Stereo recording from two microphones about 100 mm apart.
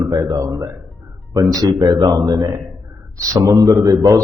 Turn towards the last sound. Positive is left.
turn(degrees=-35)  # may be behind; listen again after turning